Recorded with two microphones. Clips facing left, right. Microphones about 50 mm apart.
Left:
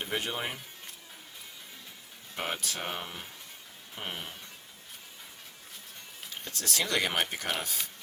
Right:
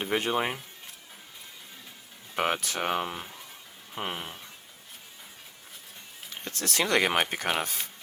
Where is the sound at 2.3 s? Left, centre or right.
Right.